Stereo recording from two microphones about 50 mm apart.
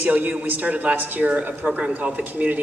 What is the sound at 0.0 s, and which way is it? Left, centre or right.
Speech, right.